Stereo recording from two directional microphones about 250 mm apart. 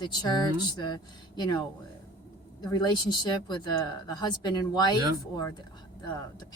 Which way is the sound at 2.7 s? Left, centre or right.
Centre.